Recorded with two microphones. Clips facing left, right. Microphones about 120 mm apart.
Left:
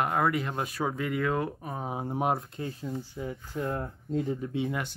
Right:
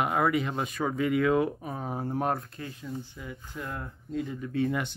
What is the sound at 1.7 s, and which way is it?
Speech, 10° left (ahead or behind).